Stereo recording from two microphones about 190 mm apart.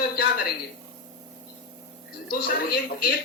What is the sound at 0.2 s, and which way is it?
Speech, 55° left (ahead or behind).